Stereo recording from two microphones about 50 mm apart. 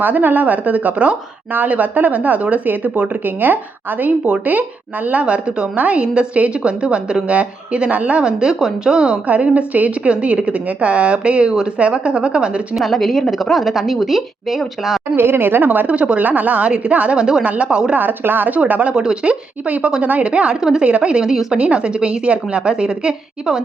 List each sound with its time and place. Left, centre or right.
0.0 s speech: right
5.2 s a woman's voice: right
8.2 s a woman's voice: centre
9.2 s a woman's voice: right
12.7 s a woman's voice: centre
15.1 s speech: right
16.0 s a woman's voice: right
17.2 s a woman's voice: centre
17.4 s a woman's voice: right
17.9 s a woman's voice: right; by 20.8 s centre
20.8 s a woman's voice: right